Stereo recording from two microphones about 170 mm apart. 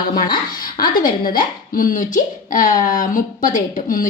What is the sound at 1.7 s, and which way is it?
A woman's voice, 55° left (ahead or behind).